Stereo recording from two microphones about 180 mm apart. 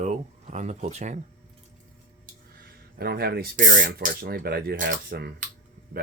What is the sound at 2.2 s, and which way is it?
Speech, 55° right (ahead or behind).